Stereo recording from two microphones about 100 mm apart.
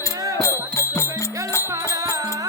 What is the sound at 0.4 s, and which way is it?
Music, 30° left (ahead or behind).